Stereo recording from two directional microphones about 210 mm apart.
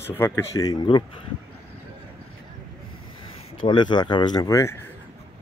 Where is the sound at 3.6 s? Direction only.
20° left (ahead or behind).